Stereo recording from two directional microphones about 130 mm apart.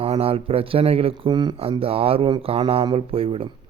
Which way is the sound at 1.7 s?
45° right (ahead or behind).